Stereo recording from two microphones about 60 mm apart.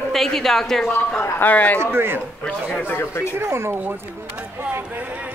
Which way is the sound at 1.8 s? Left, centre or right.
Right.